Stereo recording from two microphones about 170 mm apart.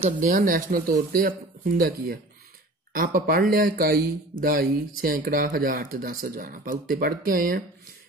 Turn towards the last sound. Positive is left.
turn(degrees=-55)  # may be behind; listen again after turning